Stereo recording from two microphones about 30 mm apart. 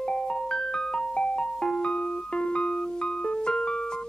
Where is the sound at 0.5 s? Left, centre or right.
Left.